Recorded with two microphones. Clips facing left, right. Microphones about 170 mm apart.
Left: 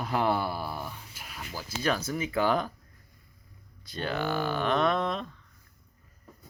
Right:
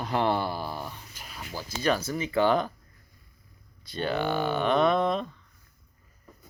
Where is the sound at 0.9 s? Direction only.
10° left (ahead or behind).